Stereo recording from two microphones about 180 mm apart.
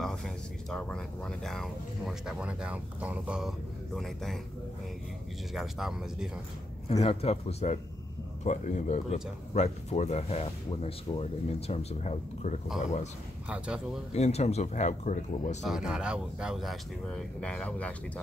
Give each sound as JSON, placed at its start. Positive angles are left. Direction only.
{"t": 0.0, "sound": "speech", "side_deg": 5}
{"t": 5.5, "sound": "speech", "side_deg": 0}
{"t": 6.9, "sound": "speech", "side_deg": 35}
{"t": 13.5, "sound": "speech", "side_deg": -5}
{"t": 14.1, "sound": "speech", "side_deg": 35}
{"t": 15.6, "sound": "speech", "side_deg": -5}